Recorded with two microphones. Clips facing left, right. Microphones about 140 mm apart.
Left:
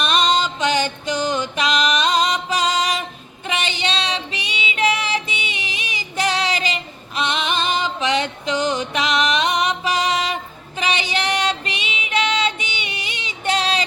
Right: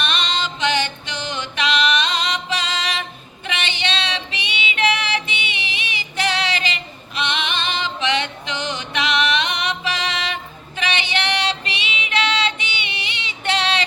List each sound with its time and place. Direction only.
0.0 s music: 40° left (ahead or behind)
3.5 s female singing: 40° left (ahead or behind)
5.2 s music: 40° left (ahead or behind)
10.8 s female singing: 40° left (ahead or behind)